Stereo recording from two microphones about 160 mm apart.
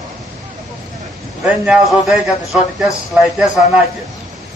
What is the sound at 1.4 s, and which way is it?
A man's voice, 5° right (ahead or behind).